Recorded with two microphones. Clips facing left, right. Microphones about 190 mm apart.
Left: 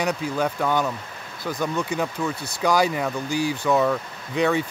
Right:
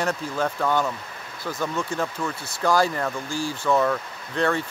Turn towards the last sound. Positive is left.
turn(degrees=10)  # may be behind; listen again after turning